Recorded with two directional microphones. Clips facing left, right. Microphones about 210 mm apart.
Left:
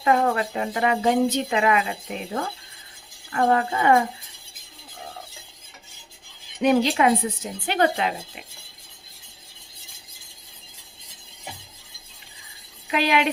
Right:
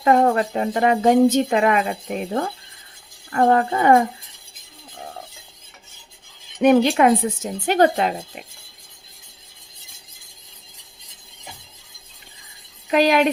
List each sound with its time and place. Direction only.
0.0 s speech: 40° right (ahead or behind)
6.6 s speech: 55° right (ahead or behind)
12.9 s speech: 45° right (ahead or behind)